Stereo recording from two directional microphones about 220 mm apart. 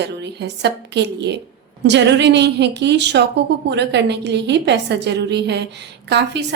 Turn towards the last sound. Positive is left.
turn(degrees=-50)  # may be behind; listen again after turning